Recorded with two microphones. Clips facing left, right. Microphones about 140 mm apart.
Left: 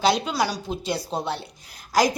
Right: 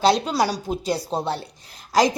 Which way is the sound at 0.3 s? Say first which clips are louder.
Right 3 dB; 35° right (ahead or behind).